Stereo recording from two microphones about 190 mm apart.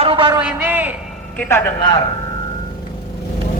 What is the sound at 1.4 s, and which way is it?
Speech, 10° left (ahead or behind).